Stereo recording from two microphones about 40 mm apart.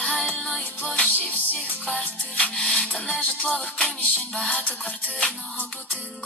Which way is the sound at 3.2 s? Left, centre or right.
Left.